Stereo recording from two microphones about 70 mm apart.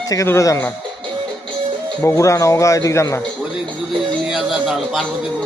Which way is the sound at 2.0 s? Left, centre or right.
Left.